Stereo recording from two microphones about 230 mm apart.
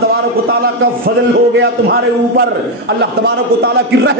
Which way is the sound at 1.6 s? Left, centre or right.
Right.